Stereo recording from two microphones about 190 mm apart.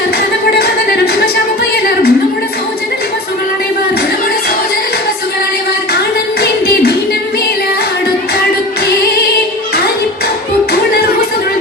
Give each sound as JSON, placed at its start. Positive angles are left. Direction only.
{"t": 0.2, "sound": "music", "side_deg": 55}
{"t": 1.7, "sound": "a sound", "side_deg": 55}
{"t": 10.7, "sound": "music", "side_deg": 55}